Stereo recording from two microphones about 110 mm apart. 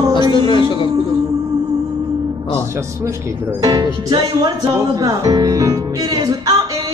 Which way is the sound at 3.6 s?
35° right (ahead or behind).